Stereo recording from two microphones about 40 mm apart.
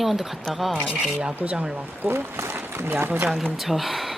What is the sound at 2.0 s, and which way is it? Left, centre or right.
Speech, right.